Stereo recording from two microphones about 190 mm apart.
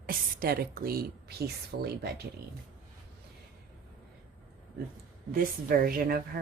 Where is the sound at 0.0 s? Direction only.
50° right (ahead or behind).